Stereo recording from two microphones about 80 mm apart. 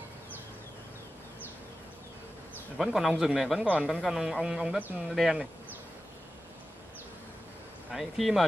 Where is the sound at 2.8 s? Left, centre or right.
Centre.